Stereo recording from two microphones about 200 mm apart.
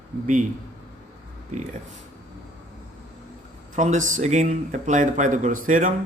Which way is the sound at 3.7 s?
40° right (ahead or behind).